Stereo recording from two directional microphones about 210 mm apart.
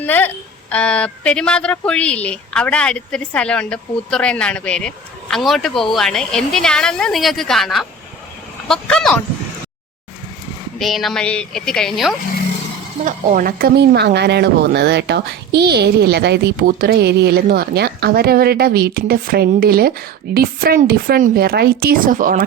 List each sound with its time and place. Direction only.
0.0 s speech: 10° left (ahead or behind)
10.8 s speech: centre (ahead or behind)
13.1 s speech: 40° right (ahead or behind)